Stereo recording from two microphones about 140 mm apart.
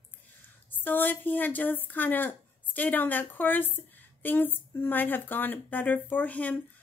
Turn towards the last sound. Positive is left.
turn(degrees=10)  # may be behind; listen again after turning